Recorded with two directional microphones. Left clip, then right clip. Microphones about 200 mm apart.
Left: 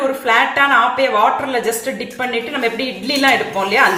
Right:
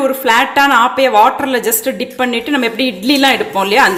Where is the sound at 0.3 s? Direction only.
55° right (ahead or behind).